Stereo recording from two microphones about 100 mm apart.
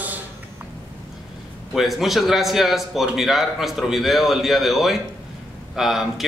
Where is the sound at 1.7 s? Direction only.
Centre (ahead or behind).